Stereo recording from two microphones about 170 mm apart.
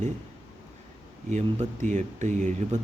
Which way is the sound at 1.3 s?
45° right (ahead or behind).